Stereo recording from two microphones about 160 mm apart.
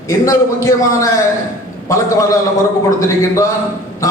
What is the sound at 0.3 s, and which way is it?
Speech, 20° left (ahead or behind).